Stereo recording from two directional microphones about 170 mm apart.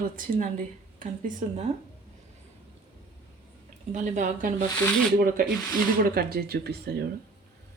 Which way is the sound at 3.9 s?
50° right (ahead or behind).